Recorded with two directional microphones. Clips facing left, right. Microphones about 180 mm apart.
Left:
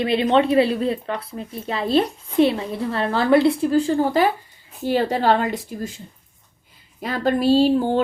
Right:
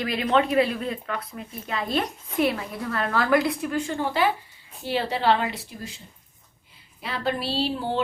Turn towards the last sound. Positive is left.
turn(degrees=45)  # may be behind; listen again after turning